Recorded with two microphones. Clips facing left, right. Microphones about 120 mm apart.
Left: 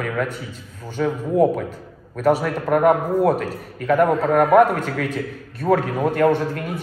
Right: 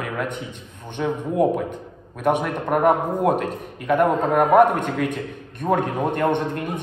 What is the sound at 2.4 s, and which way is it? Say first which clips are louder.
A man's voice: left 2 dB; 20° right (ahead or behind).